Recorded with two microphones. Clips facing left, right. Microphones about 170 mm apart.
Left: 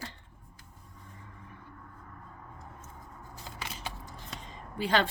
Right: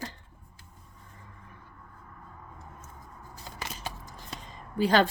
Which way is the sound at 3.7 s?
40° right (ahead or behind).